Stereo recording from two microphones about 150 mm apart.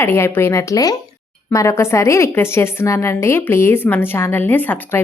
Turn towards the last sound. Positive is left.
turn(degrees=15)  # may be behind; listen again after turning